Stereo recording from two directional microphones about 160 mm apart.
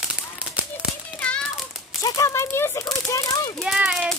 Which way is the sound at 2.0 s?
20° left (ahead or behind).